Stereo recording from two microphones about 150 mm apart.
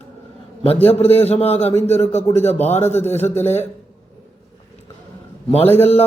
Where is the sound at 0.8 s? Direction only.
40° left (ahead or behind).